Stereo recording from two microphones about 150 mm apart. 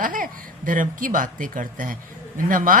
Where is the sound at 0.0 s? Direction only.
65° right (ahead or behind).